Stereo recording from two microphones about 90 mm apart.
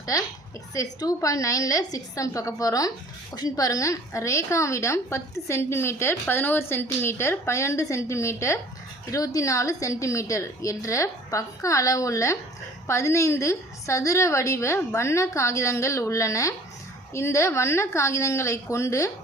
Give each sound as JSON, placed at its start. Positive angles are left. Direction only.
{"t": 0.0, "sound": "a woman's voice", "side_deg": 40}